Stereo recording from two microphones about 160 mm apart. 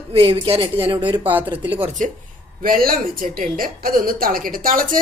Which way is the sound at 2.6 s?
65° right (ahead or behind).